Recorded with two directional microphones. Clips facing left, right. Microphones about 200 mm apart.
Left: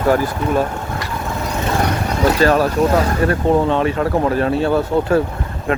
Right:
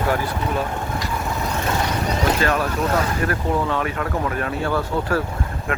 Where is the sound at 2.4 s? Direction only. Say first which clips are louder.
Left 7 dB; 35° left (ahead or behind).